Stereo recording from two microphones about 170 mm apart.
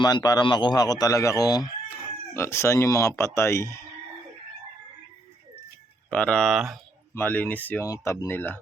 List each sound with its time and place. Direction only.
0.0 s a man's voice: 25° left (ahead or behind)
6.1 s speech: 5° left (ahead or behind)
7.1 s speech: 10° left (ahead or behind)